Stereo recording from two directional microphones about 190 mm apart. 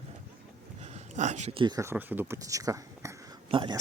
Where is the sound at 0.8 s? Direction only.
35° right (ahead or behind).